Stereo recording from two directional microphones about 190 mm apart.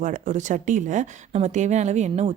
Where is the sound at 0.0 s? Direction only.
40° right (ahead or behind).